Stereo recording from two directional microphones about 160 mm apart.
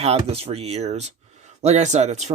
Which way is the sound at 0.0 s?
40° right (ahead or behind).